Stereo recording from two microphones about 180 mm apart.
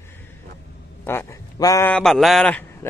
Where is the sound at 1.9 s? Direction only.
Centre (ahead or behind).